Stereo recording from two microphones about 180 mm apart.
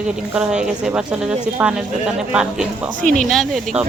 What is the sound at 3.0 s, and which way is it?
Speech, 40° left (ahead or behind).